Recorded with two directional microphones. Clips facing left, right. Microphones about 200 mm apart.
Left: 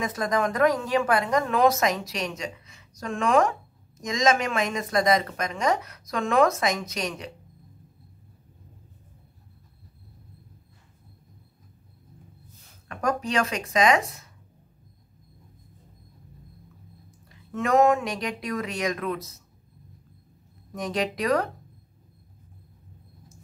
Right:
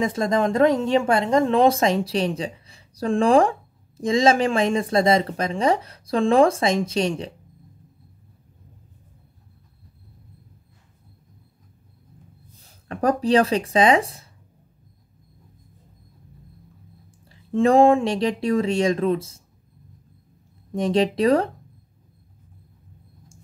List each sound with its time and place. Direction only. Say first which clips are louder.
0.0 s speech: right 5 dB; 25° right (ahead or behind)
12.6 s speech: right 6 dB; 35° right (ahead or behind)
17.3 s speech: right 6 dB; 30° right (ahead or behind)
20.7 s speech: right 8 dB; 30° right (ahead or behind)